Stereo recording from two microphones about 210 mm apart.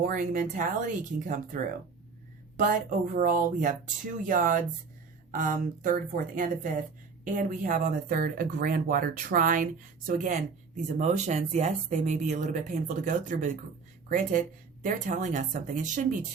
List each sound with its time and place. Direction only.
0.0 s speech: 40° right (ahead or behind)